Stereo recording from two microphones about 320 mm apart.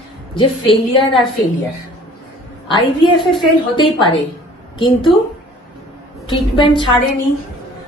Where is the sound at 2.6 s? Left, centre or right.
Centre.